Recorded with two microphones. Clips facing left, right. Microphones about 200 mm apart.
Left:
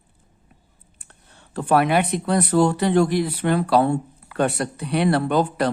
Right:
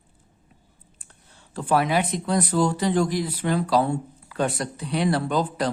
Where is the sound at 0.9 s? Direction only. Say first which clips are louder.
Left 4 dB; 60° left (ahead or behind).